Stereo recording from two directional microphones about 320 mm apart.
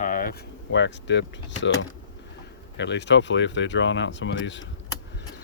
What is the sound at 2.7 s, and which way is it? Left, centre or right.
Speech, left.